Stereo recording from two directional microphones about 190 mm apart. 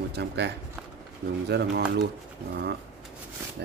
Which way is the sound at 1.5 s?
60° right (ahead or behind).